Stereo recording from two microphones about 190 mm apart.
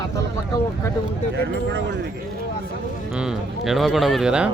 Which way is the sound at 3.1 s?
5° right (ahead or behind).